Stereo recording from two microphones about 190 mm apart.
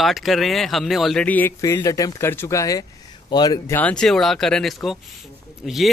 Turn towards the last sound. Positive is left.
turn(degrees=0)  # may be behind; listen again after turning